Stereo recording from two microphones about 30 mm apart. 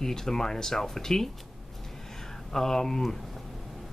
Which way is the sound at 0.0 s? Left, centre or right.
Centre.